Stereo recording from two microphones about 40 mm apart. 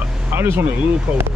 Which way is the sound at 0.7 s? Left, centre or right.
Right.